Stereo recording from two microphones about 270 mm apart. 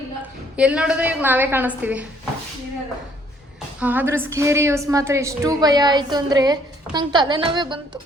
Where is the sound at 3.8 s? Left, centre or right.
Centre.